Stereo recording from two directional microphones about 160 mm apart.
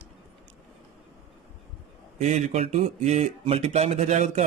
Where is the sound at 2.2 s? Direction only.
45° right (ahead or behind).